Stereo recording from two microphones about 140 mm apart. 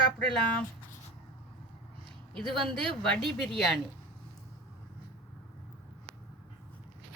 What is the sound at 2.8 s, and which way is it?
A woman's voice, centre (ahead or behind).